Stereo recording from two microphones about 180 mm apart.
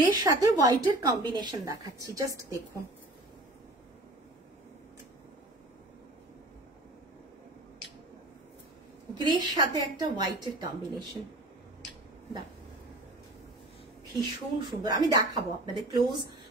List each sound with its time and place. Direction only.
0.0 s speech: 20° right (ahead or behind)
9.1 s speech: 25° right (ahead or behind)
14.7 s speech: 20° right (ahead or behind)